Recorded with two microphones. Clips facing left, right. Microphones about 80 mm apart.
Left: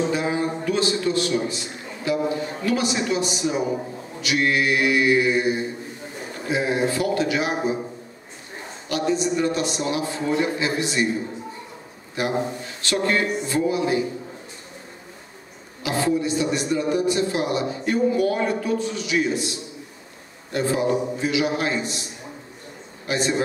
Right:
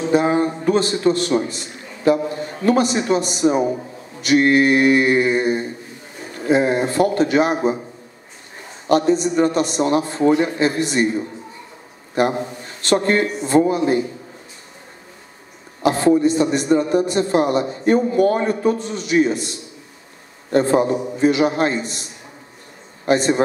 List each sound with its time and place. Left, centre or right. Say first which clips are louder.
0.1 s a man's voice: right 7 dB; right
8.8 s a man's voice: right 7 dB; right
12.2 s a man's voice: right 5 dB; right
15.8 s a man's voice: right 8 dB; right
23.0 s a man's voice: right 7 dB; right